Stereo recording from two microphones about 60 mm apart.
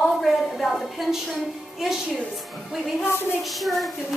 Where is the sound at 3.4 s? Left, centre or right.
Centre.